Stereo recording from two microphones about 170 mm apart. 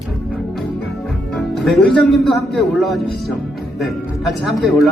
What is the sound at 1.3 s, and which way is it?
A man's voice, centre (ahead or behind).